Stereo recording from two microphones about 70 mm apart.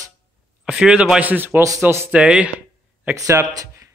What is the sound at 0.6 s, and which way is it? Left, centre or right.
Speech, centre.